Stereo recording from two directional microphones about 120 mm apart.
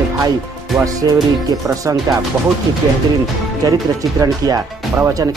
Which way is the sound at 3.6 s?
30° right (ahead or behind).